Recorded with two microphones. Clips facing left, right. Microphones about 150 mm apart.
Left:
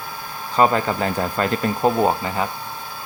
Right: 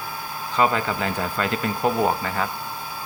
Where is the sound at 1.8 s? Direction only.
20° left (ahead or behind).